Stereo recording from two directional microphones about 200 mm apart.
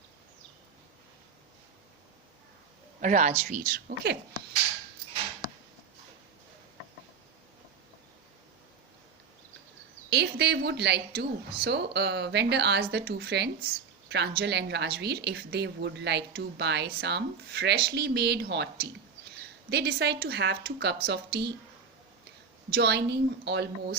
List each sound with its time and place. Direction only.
3.0 s a woman's voice: 35° right (ahead or behind)
10.1 s a woman's voice: 55° right (ahead or behind)
22.7 s a woman's voice: 55° right (ahead or behind)